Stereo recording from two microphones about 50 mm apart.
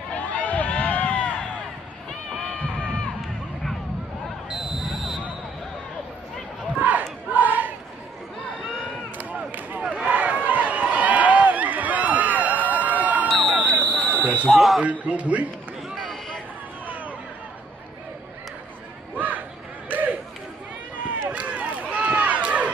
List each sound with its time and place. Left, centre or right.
0.1 s run: left
4.5 s basketball bounce: centre
6.8 s battle cry: right
9.2 s a sound: right
9.8 s run: right
13.7 s buzzer: centre
14.0 s basketball bounce: centre
14.5 s smoke detector: centre
14.8 s a man's voice: right
16.8 s a sound: right
19.1 s a sound: right
19.9 s crowd: right
21.3 s run: right